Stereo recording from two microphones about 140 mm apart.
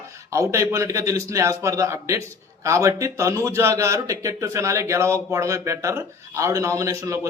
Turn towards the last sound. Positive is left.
turn(degrees=-20)  # may be behind; listen again after turning